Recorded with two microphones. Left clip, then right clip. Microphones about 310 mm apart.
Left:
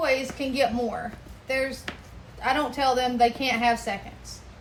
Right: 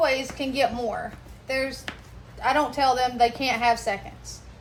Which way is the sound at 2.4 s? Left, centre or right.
Centre.